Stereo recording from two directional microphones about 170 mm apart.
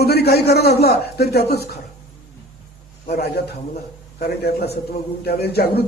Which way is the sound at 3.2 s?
75° left (ahead or behind).